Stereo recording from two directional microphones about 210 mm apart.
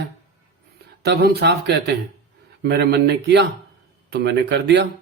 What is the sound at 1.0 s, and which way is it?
Speech, 50° right (ahead or behind).